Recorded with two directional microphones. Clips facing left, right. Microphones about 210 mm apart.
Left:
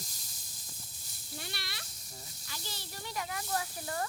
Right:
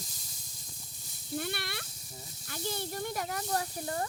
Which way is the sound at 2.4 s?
55° right (ahead or behind).